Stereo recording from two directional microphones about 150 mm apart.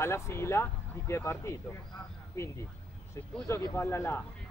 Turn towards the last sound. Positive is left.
turn(degrees=15)  # may be behind; listen again after turning